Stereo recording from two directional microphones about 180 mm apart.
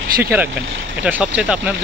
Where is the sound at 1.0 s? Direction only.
5° right (ahead or behind).